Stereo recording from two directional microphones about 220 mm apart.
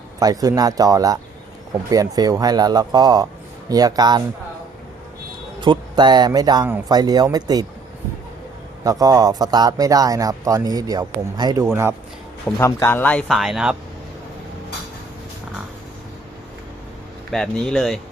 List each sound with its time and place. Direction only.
0.2 s speech: 15° right (ahead or behind)
5.5 s speech: 20° right (ahead or behind)
8.8 s speech: 15° right (ahead or behind)
12.5 s speech: 15° left (ahead or behind); by 13.7 s 5° right (ahead or behind)
17.3 s speech: centre (ahead or behind)